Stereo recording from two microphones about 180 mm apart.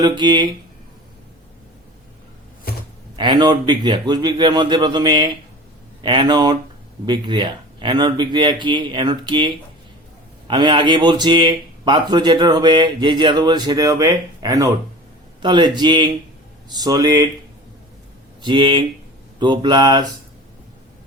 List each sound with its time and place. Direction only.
0.0 s speech: 25° right (ahead or behind)
3.2 s speech: 25° right (ahead or behind)
10.5 s speech: 25° right (ahead or behind)
18.4 s speech: 25° right (ahead or behind)